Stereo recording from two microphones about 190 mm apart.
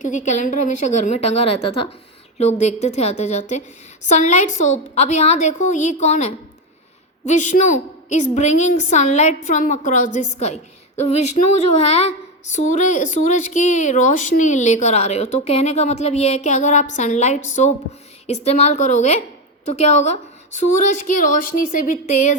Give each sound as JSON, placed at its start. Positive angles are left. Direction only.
{"t": 0.0, "sound": "speech", "side_deg": 40}